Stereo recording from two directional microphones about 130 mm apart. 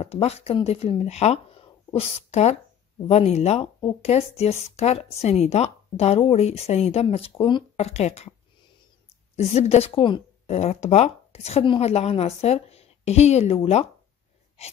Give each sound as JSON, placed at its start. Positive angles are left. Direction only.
{"t": 0.0, "sound": "speech", "side_deg": 50}
{"t": 9.4, "sound": "a woman's voice", "side_deg": 55}
{"t": 10.5, "sound": "speech", "side_deg": 60}
{"t": 14.6, "sound": "speech", "side_deg": 55}